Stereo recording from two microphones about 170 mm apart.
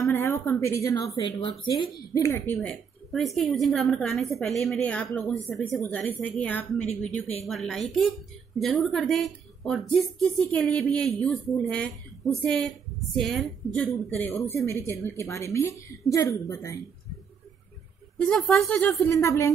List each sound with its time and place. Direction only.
0.0 s speech: 15° left (ahead or behind)
7.1 s a woman's voice: 40° left (ahead or behind)
7.4 s speech: centre (ahead or behind)
14.2 s speech: 15° left (ahead or behind)
18.1 s speech: 5° left (ahead or behind)